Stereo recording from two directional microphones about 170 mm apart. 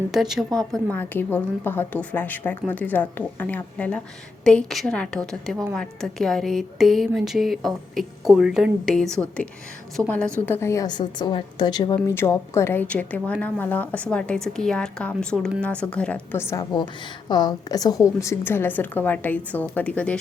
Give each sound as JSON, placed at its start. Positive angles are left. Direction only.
{"t": 0.1, "sound": "a woman's voice", "side_deg": 0}